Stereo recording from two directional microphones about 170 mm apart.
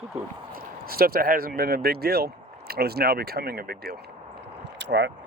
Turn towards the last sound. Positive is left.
turn(degrees=-90)